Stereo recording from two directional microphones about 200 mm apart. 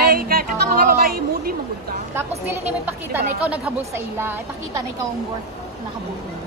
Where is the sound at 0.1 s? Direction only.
45° right (ahead or behind).